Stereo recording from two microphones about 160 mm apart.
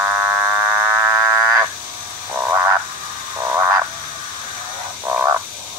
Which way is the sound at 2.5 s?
15° right (ahead or behind).